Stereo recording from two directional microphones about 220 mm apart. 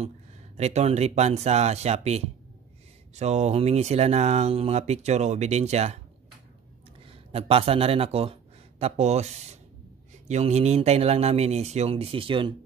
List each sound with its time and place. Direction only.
0.6 s speech: 30° right (ahead or behind)
7.1 s speech: 25° right (ahead or behind)